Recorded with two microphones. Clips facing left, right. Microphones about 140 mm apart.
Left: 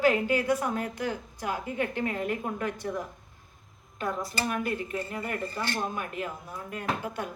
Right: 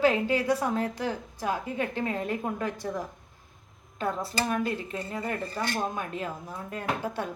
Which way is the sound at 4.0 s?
30° right (ahead or behind).